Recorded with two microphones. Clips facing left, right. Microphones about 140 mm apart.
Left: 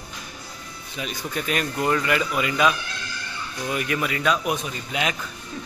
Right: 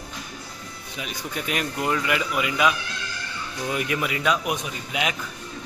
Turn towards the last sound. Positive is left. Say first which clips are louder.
# left 1 dB
turn(degrees=-10)  # may be behind; listen again after turning